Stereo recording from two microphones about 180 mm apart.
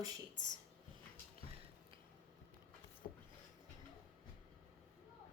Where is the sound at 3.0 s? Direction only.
35° left (ahead or behind).